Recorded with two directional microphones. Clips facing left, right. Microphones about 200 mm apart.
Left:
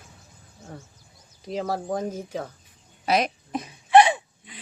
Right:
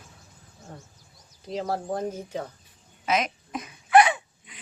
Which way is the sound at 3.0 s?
35° left (ahead or behind).